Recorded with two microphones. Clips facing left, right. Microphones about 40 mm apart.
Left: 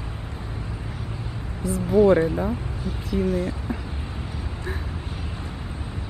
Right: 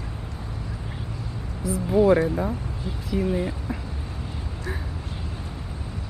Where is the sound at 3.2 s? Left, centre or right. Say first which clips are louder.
Left 1 dB; centre.